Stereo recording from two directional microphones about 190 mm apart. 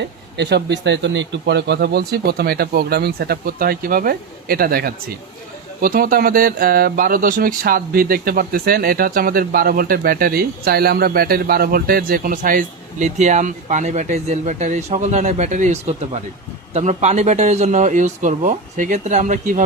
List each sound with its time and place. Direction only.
0.3 s a man's voice: 65° right (ahead or behind); by 19.6 s 40° right (ahead or behind)